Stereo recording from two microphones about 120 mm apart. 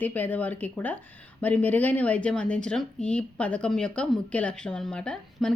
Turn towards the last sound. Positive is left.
turn(degrees=5)  # may be behind; listen again after turning